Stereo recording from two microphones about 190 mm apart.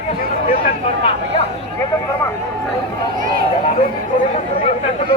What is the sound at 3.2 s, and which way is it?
Speech, 45° right (ahead or behind).